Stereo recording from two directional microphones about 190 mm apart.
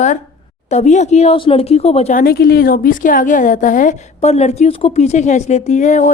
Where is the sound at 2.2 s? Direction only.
55° left (ahead or behind).